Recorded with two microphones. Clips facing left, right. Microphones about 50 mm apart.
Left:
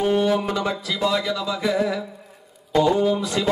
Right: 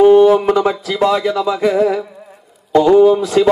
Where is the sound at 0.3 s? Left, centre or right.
Right.